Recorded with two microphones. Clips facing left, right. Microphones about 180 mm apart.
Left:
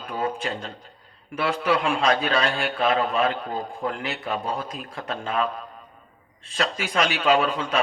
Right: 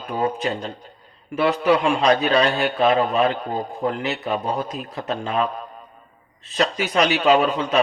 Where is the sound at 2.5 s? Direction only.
25° right (ahead or behind).